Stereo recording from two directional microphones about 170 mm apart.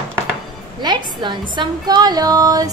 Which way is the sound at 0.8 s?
25° right (ahead or behind).